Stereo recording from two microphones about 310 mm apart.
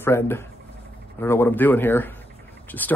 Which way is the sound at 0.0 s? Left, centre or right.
Centre.